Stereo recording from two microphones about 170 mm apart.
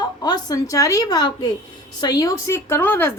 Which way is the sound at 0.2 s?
25° left (ahead or behind).